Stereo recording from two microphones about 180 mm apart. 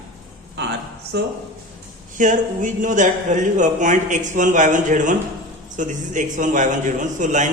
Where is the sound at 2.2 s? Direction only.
45° right (ahead or behind).